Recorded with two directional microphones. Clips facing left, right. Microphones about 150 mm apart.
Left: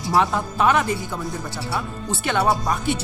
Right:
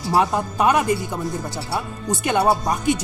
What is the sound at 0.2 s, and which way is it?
Speech, 15° right (ahead or behind).